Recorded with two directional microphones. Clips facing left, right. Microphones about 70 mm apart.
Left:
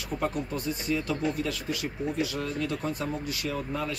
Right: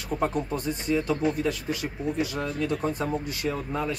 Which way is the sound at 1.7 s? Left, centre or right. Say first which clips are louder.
Right 1 dB; right.